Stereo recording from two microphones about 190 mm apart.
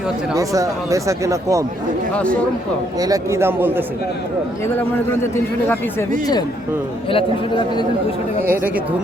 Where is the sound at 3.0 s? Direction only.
15° right (ahead or behind).